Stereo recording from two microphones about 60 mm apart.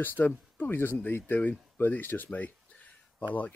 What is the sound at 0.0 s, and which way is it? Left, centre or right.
Speech, left.